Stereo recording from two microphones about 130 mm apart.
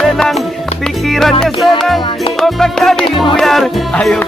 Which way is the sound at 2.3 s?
Centre (ahead or behind).